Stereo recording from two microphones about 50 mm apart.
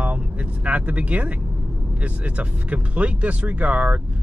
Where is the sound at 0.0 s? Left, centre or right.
Right.